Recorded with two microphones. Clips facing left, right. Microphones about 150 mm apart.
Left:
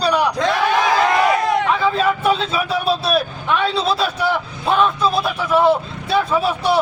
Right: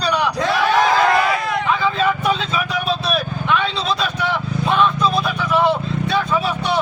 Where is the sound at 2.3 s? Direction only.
30° left (ahead or behind).